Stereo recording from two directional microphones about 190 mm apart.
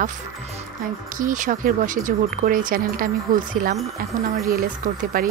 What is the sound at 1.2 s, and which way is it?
Speech, 45° right (ahead or behind).